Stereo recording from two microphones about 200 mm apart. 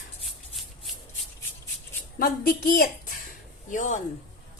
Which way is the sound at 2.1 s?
45° left (ahead or behind).